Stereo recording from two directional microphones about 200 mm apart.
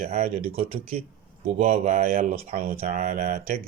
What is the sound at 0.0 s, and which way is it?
Speech, 35° right (ahead or behind).